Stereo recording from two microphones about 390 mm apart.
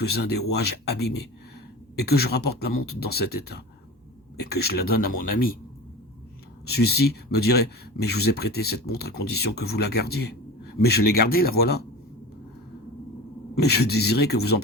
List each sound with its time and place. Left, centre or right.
0.0 s speech: left
6.7 s speech: left
13.6 s speech: left